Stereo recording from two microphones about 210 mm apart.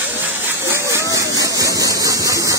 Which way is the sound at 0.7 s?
15° right (ahead or behind).